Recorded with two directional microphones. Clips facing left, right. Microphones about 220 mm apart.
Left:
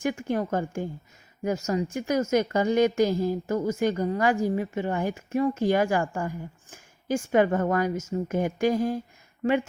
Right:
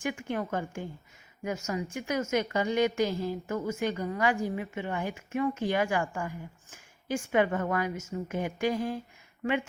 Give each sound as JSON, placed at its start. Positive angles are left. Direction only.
{"t": 0.0, "sound": "a woman's voice", "side_deg": 40}